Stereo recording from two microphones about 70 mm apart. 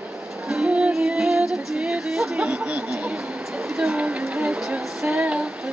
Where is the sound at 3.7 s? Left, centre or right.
Centre.